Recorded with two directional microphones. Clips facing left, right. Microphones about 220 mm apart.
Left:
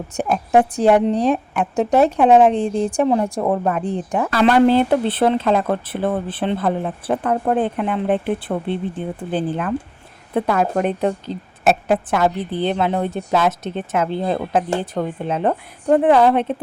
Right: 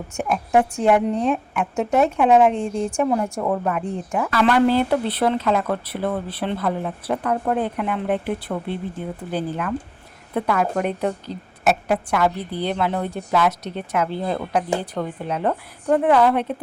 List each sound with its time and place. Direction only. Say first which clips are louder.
0.2 s a woman's voice: left 3 dB; 35° left (ahead or behind)